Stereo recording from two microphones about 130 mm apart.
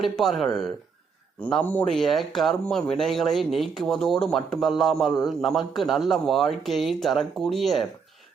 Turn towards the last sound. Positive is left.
turn(degrees=0)  # may be behind; listen again after turning